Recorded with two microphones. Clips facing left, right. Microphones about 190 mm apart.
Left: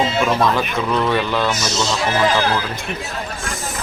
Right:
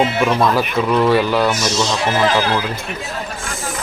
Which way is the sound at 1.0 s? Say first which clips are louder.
Right 4 dB; 10° right (ahead or behind).